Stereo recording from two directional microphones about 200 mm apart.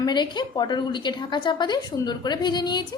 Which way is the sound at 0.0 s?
20° left (ahead or behind).